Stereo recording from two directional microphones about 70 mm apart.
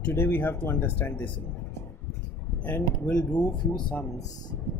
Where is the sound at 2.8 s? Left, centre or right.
Left.